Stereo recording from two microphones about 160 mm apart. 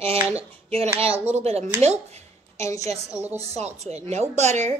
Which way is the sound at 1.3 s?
40° right (ahead or behind).